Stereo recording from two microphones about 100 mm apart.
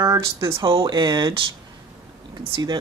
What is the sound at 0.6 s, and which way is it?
Speech, 55° right (ahead or behind).